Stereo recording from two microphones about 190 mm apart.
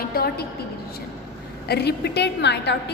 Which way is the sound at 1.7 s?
60° left (ahead or behind).